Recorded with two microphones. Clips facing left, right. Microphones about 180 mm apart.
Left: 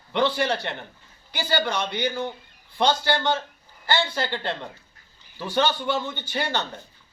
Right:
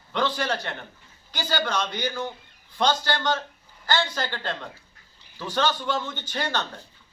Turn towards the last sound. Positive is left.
turn(degrees=15)  # may be behind; listen again after turning